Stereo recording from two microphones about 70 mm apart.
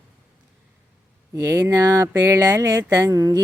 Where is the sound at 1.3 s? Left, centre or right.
Right.